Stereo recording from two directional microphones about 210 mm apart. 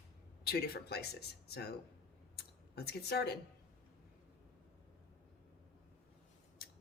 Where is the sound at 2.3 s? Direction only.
50° left (ahead or behind).